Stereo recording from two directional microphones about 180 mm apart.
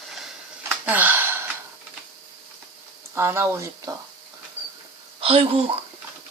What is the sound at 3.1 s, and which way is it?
Speech, 15° right (ahead or behind).